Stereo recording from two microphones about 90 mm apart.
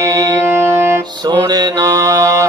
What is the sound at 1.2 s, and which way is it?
Mantra, 50° right (ahead or behind).